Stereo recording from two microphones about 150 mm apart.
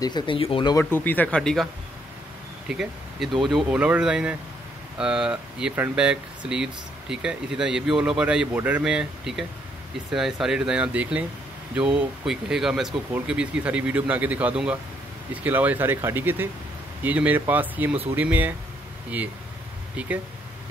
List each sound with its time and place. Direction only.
0.0 s speech: 30° left (ahead or behind)
0.7 s speech: 15° left (ahead or behind)
2.7 s speech: 5° right (ahead or behind)
20.0 s speech: 10° right (ahead or behind)